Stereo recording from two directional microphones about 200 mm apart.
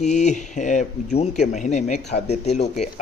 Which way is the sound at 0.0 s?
35° left (ahead or behind).